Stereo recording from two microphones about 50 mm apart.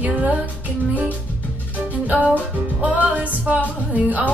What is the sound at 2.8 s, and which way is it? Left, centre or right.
Music, right.